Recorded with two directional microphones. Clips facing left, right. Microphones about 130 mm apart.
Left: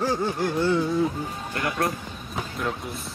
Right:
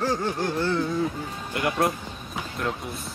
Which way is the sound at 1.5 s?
25° right (ahead or behind).